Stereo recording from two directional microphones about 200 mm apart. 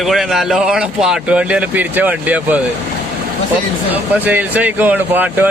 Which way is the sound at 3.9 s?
10° right (ahead or behind).